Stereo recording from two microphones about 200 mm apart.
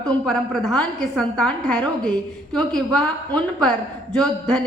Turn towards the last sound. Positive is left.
turn(degrees=5)  # may be behind; listen again after turning